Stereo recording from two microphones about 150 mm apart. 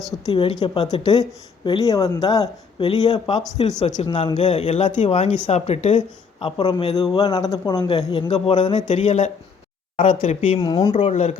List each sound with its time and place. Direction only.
0.3 s a woman's voice: 35° left (ahead or behind)
3.8 s speech: 50° left (ahead or behind)
4.0 s speech: 35° left (ahead or behind)
4.4 s speech: 45° left (ahead or behind)
6.4 s a woman's voice: 30° left (ahead or behind)
7.9 s speech: 40° left (ahead or behind)
8.7 s speech: 50° left (ahead or behind)
10.6 s a woman's voice: 25° left (ahead or behind)
11.0 s speech: 45° left (ahead or behind)